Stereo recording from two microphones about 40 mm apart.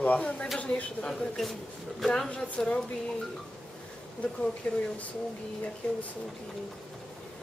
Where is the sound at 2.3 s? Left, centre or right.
Left.